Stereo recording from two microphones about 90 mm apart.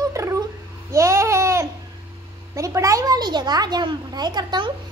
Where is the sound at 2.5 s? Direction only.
35° right (ahead or behind).